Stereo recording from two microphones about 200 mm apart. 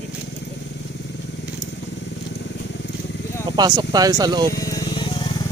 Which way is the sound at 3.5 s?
20° right (ahead or behind).